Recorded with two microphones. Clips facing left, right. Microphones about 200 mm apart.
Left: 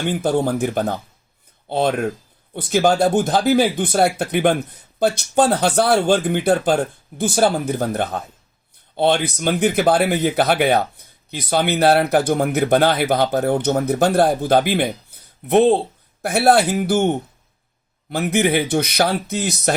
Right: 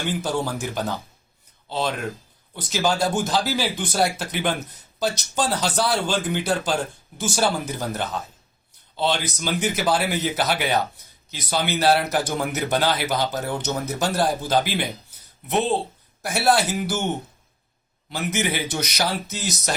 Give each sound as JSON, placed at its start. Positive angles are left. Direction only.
{"t": 0.0, "sound": "speech", "side_deg": 55}
{"t": 18.1, "sound": "speech", "side_deg": 55}